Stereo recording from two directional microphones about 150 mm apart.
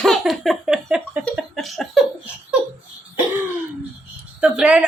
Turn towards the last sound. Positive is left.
turn(degrees=-5)  # may be behind; listen again after turning